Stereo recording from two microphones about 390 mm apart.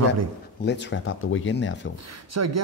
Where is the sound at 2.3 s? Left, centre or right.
Right.